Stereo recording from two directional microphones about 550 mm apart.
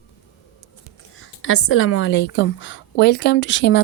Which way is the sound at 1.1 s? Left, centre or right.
Left.